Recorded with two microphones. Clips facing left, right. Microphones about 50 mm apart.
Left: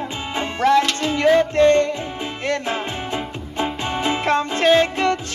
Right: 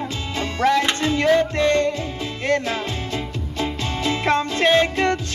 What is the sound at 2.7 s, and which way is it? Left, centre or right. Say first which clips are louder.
Music: left 1 dB; left.